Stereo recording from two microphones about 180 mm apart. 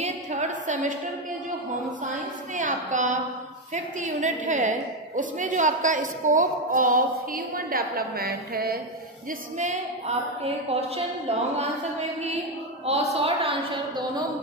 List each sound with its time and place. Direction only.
0.0 s a sound: 40° right (ahead or behind)
1.9 s a woman's voice: 45° right (ahead or behind)
9.6 s a woman's voice: 40° right (ahead or behind)